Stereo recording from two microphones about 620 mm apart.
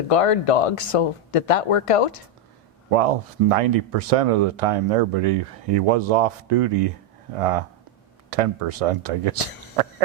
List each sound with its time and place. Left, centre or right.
0.1 s speech: left
2.9 s speech: right